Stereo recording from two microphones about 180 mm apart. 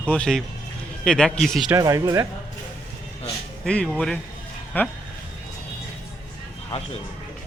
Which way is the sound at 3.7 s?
5° left (ahead or behind).